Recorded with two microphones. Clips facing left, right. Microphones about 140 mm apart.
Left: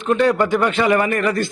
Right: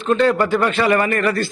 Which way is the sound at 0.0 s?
15° left (ahead or behind).